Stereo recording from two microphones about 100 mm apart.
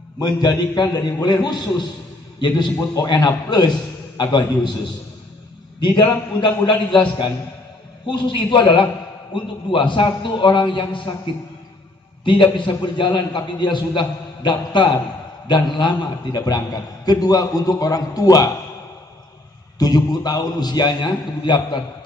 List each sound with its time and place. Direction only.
0.2 s a man's voice: 45° left (ahead or behind)
5.8 s a man's voice: 50° left (ahead or behind)
8.1 s a man's voice: 55° left (ahead or behind)
12.3 s a man's voice: 55° left (ahead or behind); by 18.5 s 35° left (ahead or behind)
19.8 s a man's voice: 40° left (ahead or behind)